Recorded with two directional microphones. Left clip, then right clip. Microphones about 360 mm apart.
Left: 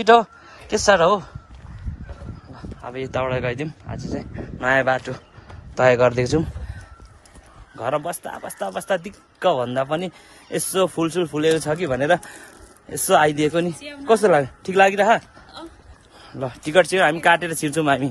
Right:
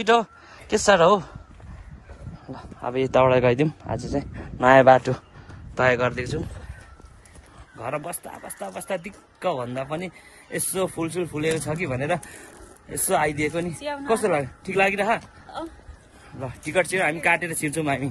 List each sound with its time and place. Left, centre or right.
0.0 s a man's voice: centre
2.5 s speech: centre
6.2 s speech: centre
7.8 s speech: centre
16.3 s speech: centre